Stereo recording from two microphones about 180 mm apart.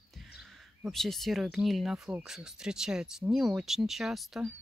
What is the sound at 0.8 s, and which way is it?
Speech, centre (ahead or behind).